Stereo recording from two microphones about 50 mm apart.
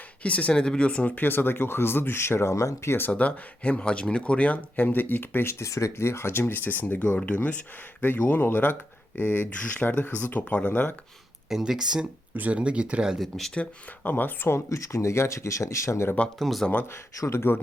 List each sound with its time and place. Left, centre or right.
0.2 s speech: left
1.2 s speech: left
2.5 s speech: left
3.1 s speech: left
8.0 s speech: left
11.4 s speech: centre
12.4 s speech: right
13.3 s speech: centre
14.0 s speech: left
14.7 s speech: left
16.4 s speech: centre
16.9 s speech: left